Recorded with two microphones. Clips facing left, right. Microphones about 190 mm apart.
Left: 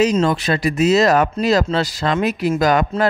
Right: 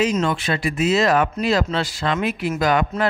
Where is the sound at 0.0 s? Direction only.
35° left (ahead or behind).